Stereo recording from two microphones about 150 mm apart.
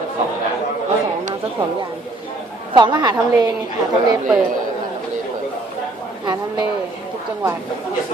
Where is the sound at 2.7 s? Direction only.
30° right (ahead or behind).